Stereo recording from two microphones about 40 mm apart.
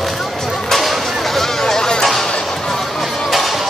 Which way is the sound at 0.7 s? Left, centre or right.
Centre.